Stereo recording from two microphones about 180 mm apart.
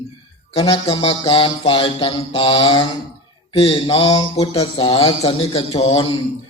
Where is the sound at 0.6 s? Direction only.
30° left (ahead or behind).